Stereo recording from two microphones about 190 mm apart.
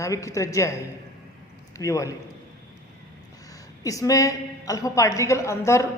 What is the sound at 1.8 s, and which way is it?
Speech, 15° left (ahead or behind).